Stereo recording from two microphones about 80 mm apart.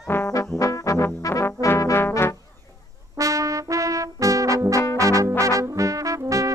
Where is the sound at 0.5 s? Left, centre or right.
Left.